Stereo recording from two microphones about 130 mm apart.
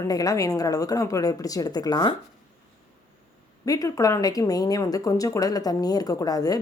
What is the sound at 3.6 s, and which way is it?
A woman's voice, 25° left (ahead or behind).